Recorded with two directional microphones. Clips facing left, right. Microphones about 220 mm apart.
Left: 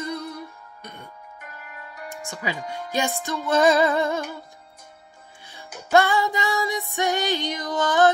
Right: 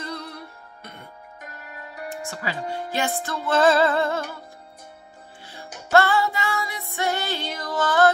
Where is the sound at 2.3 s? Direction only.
15° left (ahead or behind).